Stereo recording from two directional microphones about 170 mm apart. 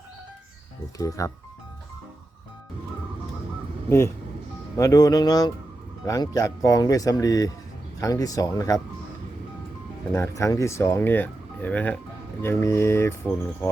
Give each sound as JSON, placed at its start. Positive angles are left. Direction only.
{"t": 0.9, "sound": "speech", "side_deg": 20}
{"t": 3.8, "sound": "speech", "side_deg": 15}
{"t": 10.1, "sound": "speech", "side_deg": 15}